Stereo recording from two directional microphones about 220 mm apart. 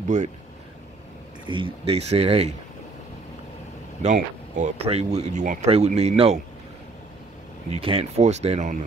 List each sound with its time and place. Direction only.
1.4 s speech: 20° right (ahead or behind)
4.0 s speech: 30° right (ahead or behind)
7.7 s speech: 25° right (ahead or behind)